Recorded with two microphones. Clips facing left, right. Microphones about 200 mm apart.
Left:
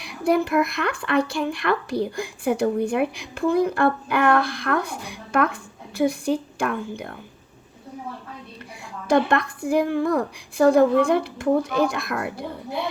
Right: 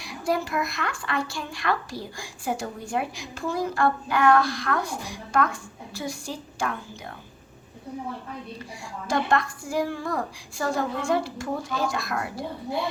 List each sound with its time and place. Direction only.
0.0 s speech: 60° left (ahead or behind)
9.0 s speech: 60° left (ahead or behind)